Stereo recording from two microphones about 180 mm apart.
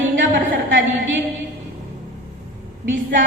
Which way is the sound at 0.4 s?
90° right.